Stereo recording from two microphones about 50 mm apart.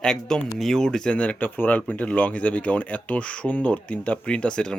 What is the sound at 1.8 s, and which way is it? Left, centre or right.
Speech, left.